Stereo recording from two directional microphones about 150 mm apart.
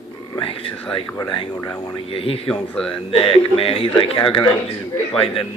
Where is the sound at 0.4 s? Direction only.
35° left (ahead or behind).